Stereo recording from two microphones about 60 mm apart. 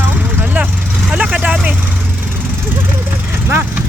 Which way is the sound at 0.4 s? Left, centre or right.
Right.